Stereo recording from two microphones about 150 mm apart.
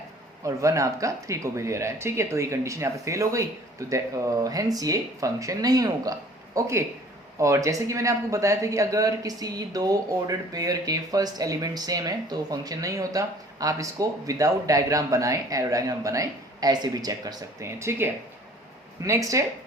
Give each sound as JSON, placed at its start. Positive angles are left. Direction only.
{"t": 0.4, "sound": "speech", "side_deg": -20}